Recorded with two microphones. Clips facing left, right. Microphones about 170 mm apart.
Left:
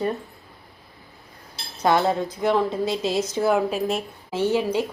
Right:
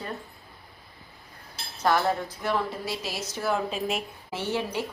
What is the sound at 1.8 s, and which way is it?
A woman's voice, 20° left (ahead or behind).